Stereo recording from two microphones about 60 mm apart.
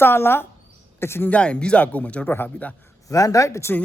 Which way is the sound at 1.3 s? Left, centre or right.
Centre.